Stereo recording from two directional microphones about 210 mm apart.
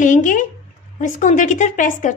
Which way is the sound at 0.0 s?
40° left (ahead or behind).